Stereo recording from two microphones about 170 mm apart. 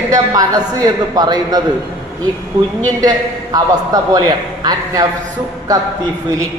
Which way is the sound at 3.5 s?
25° right (ahead or behind).